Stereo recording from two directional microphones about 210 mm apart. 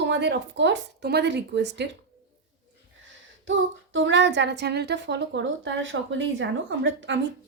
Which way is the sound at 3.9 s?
60° right (ahead or behind).